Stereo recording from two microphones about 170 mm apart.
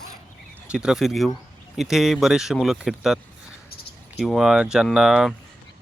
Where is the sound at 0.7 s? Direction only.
5° right (ahead or behind).